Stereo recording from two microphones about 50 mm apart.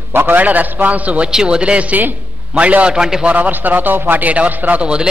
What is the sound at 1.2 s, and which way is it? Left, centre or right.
A man's voice, centre.